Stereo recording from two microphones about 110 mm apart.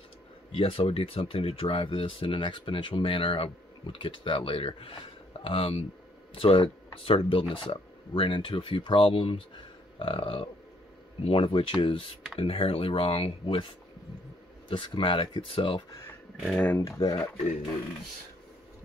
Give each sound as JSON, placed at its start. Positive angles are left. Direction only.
{"t": 0.5, "sound": "speech", "side_deg": 55}
{"t": 14.7, "sound": "speech", "side_deg": 50}
{"t": 16.4, "sound": "speech", "side_deg": 10}
{"t": 16.7, "sound": "speech", "side_deg": 30}